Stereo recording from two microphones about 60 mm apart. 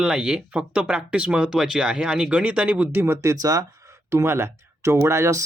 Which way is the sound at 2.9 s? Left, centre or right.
Right.